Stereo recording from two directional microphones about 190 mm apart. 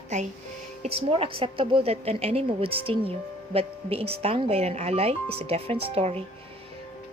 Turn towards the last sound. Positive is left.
turn(degrees=-30)  # may be behind; listen again after turning